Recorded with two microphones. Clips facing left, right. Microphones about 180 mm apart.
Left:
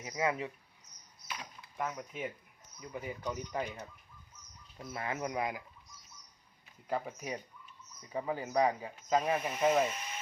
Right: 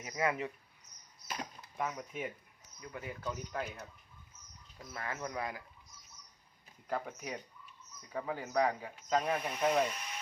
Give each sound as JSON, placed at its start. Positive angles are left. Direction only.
{"t": 0.0, "sound": "speech", "side_deg": 15}
{"t": 1.8, "sound": "speech", "side_deg": 0}
{"t": 2.8, "sound": "speech", "side_deg": 15}
{"t": 4.9, "sound": "speech", "side_deg": 15}
{"t": 6.8, "sound": "speech", "side_deg": 5}